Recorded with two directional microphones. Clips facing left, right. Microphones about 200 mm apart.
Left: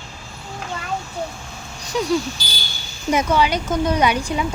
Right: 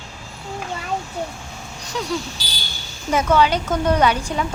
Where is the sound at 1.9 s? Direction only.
10° left (ahead or behind).